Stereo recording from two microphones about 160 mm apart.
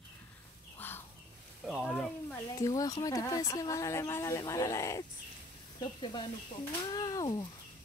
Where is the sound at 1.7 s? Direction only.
5° right (ahead or behind).